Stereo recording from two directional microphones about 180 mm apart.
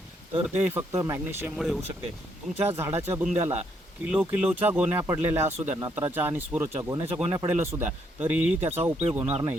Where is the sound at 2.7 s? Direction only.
10° right (ahead or behind).